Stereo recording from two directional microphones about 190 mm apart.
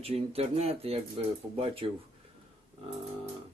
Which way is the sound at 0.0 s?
30° right (ahead or behind).